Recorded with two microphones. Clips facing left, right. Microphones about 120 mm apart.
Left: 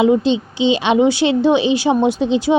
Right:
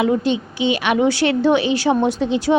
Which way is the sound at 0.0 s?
20° left (ahead or behind).